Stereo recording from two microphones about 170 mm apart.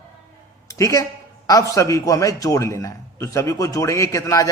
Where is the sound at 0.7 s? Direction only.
20° left (ahead or behind).